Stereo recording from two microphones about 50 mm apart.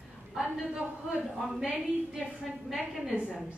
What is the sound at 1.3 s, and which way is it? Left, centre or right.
A woman's voice, centre.